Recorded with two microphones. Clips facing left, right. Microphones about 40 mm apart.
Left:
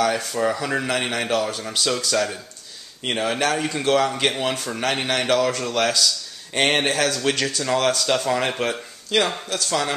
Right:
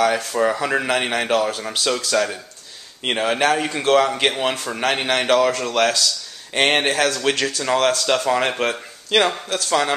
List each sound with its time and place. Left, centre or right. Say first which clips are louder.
0.4 s a man's voice: right 4 dB; centre